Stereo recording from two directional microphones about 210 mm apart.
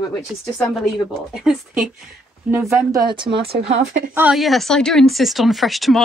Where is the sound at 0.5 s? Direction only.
Centre (ahead or behind); by 3.6 s 25° right (ahead or behind).